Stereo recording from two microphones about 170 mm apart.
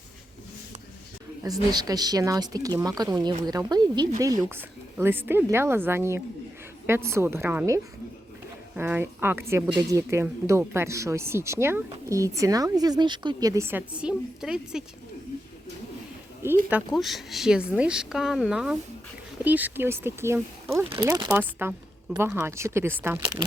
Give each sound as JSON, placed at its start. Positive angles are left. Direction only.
{"t": 1.5, "sound": "a woman's voice", "side_deg": -20}
{"t": 16.4, "sound": "a woman's voice", "side_deg": -10}
{"t": 16.9, "sound": "a woman's voice", "side_deg": 0}